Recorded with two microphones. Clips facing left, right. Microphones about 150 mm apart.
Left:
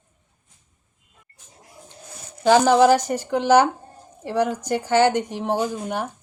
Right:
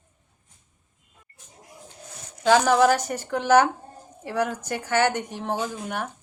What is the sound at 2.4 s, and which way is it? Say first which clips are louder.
Speech: left 3 dB; 15° left (ahead or behind).